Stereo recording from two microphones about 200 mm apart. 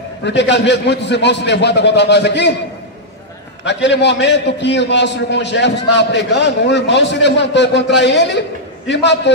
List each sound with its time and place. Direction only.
0.2 s a man's voice: 60° left (ahead or behind)
3.6 s a man's voice: 60° left (ahead or behind)